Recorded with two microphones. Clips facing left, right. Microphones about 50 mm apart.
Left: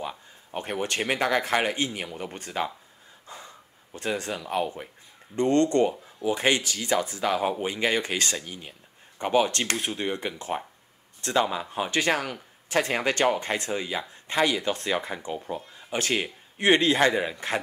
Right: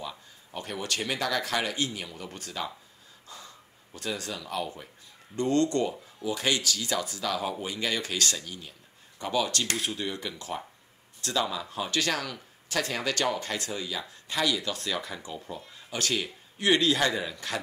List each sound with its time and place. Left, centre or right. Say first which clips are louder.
0.5 s a man's voice: left 4 dB; left